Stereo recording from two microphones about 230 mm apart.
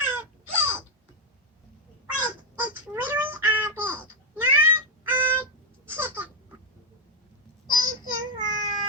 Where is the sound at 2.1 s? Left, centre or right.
Centre.